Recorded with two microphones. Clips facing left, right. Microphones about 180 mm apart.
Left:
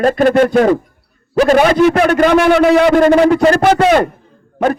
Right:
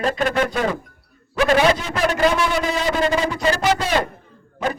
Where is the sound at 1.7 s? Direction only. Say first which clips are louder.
Left 12 dB; 60° left (ahead or behind).